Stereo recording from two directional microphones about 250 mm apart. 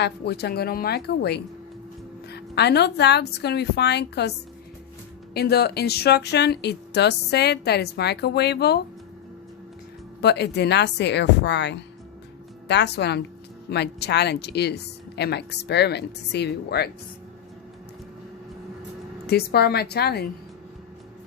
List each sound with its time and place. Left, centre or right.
0.0 s speech: left
10.2 s speech: left
19.3 s speech: left